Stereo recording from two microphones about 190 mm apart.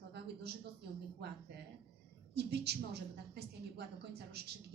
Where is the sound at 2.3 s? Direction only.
60° right (ahead or behind).